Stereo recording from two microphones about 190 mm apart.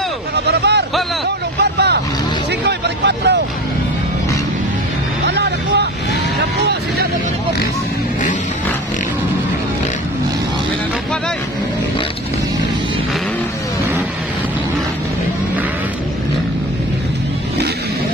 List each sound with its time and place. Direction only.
0.5 s a sound: 60° right (ahead or behind)
1.6 s speech: 60° right (ahead or behind)
5.2 s vehicle: 60° right (ahead or behind)